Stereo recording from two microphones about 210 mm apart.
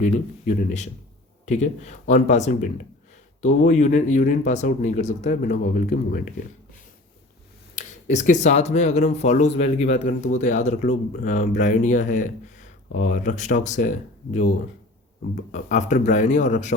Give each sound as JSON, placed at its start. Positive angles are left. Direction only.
{"t": 0.0, "sound": "speech", "side_deg": 35}
{"t": 7.8, "sound": "speech", "side_deg": 35}
{"t": 15.5, "sound": "speech", "side_deg": 35}